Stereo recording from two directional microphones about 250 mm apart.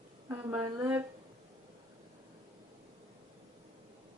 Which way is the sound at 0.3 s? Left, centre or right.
Centre.